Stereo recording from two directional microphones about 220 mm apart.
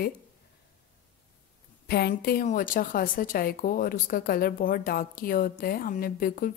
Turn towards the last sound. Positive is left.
turn(degrees=40)  # may be behind; listen again after turning